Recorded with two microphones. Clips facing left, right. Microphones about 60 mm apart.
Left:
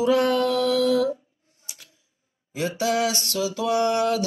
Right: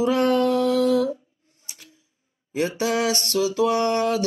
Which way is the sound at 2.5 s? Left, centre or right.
Right.